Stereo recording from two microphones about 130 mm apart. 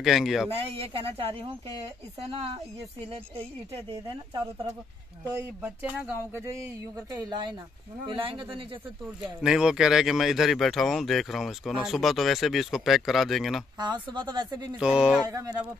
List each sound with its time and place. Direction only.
0.0 s speech: centre (ahead or behind)
0.5 s speech: 50° right (ahead or behind)
5.6 s speech: 10° right (ahead or behind); by 8.6 s 40° right (ahead or behind)
9.4 s speech: 5° right (ahead or behind)
13.7 s speech: 35° right (ahead or behind)
14.8 s speech: 5° right (ahead or behind)
15.2 s speech: 25° right (ahead or behind)